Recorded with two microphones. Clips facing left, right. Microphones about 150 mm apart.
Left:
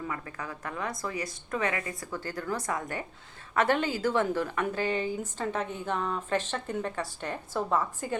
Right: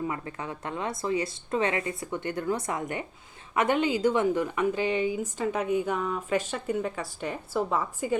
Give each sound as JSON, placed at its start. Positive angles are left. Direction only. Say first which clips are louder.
{"t": 0.1, "sound": "a woman's voice", "louder": "right 3 dB", "side_deg": -25}